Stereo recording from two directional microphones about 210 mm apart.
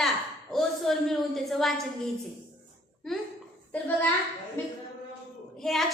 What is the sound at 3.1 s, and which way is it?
Speech, centre (ahead or behind).